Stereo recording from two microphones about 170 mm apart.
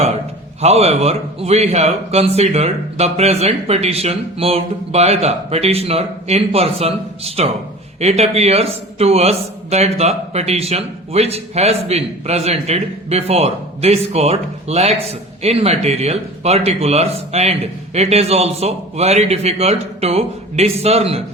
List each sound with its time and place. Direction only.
0.6 s a man's voice: 35° right (ahead or behind)